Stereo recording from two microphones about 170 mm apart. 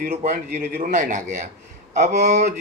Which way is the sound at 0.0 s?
50° right (ahead or behind).